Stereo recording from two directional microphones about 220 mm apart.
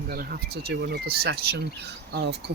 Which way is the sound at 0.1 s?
45° right (ahead or behind).